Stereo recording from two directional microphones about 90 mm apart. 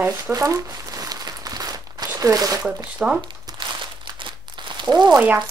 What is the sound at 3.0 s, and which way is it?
Speech, 10° right (ahead or behind).